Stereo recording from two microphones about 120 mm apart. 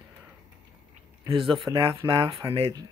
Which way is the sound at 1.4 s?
Centre (ahead or behind).